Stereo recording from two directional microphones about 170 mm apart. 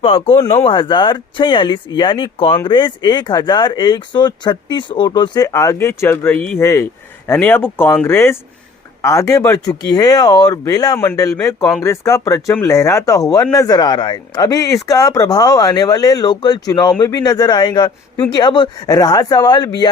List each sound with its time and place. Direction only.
0.0 s speech: 30° left (ahead or behind)